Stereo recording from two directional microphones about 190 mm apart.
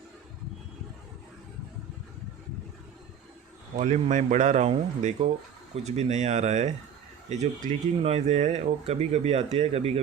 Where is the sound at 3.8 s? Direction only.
40° right (ahead or behind).